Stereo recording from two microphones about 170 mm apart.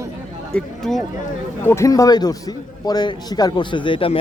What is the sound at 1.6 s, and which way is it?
A man's voice, 15° left (ahead or behind).